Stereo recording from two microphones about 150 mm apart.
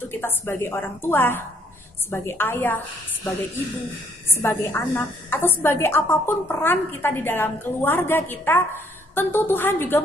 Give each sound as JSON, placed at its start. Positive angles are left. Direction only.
{"t": 0.1, "sound": "a woman's voice", "side_deg": 15}
{"t": 4.3, "sound": "a woman's voice", "side_deg": 15}